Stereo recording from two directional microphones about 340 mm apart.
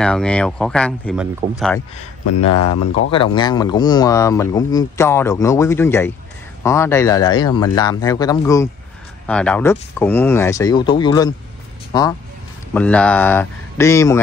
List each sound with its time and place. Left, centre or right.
0.0 s speech: centre
2.2 s speech: left
3.3 s speech: centre